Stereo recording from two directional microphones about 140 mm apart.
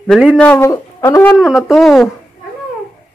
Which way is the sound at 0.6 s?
20° left (ahead or behind).